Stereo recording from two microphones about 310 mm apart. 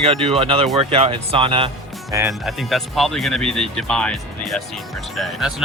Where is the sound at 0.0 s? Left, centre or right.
Centre.